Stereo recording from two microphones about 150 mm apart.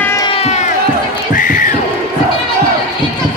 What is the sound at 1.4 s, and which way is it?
Crowd, 60° left (ahead or behind).